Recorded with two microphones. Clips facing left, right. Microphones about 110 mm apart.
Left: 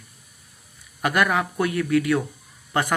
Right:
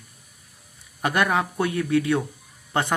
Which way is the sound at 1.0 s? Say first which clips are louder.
Left 1 dB; 30° right (ahead or behind).